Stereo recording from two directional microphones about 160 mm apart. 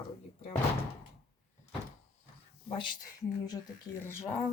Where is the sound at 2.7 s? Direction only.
30° left (ahead or behind).